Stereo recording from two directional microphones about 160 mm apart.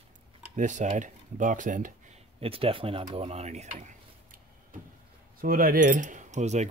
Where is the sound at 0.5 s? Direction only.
50° right (ahead or behind).